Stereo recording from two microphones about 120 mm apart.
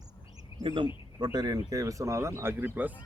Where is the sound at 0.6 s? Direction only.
40° right (ahead or behind); by 2.9 s 15° right (ahead or behind).